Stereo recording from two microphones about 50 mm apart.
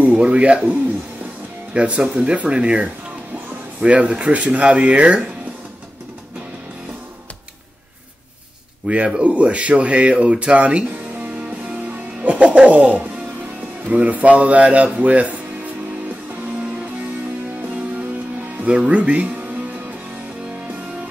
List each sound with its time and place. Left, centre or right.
0.0 s speech: right
8.8 s speech: right
11.9 s music: right
13.8 s speech: right
18.7 s speech: right